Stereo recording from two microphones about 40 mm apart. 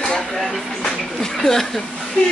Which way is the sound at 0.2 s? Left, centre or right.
Centre.